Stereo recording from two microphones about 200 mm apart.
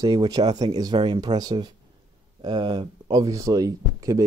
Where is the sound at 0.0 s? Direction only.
20° right (ahead or behind).